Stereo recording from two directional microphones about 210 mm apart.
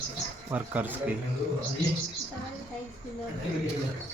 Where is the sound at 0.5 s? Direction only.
10° right (ahead or behind).